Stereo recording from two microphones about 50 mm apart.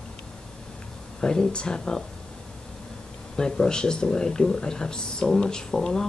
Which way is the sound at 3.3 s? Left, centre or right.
Centre.